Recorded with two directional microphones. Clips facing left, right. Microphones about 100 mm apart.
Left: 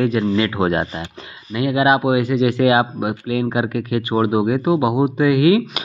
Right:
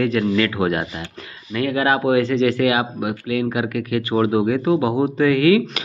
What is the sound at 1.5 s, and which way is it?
Speech, 15° left (ahead or behind).